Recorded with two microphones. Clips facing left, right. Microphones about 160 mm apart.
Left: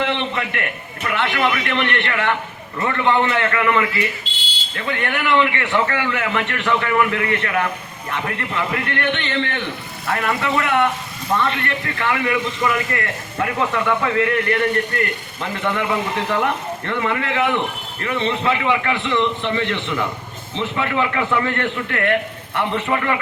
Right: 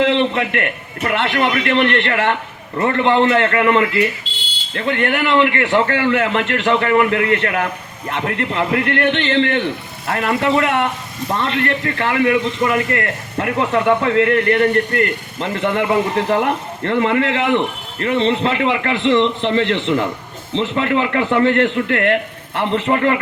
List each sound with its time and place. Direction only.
1.0 s a man's voice: 35° right (ahead or behind)